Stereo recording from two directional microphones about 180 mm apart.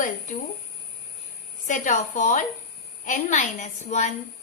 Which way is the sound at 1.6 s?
45° left (ahead or behind).